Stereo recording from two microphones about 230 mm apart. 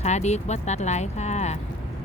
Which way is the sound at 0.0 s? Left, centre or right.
Left.